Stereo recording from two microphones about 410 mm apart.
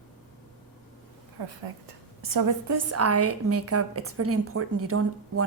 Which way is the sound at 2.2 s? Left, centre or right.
Right.